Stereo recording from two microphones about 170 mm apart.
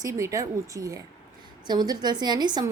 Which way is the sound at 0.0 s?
20° right (ahead or behind).